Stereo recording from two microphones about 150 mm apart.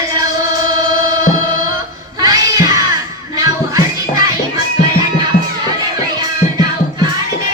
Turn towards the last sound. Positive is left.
turn(degrees=-25)  # may be behind; listen again after turning